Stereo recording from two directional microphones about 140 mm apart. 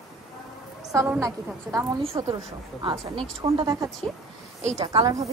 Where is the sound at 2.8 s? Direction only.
40° right (ahead or behind).